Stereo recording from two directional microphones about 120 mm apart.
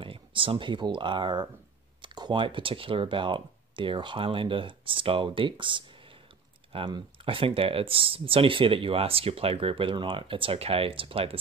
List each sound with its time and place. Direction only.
0.0 s speech: 45° right (ahead or behind)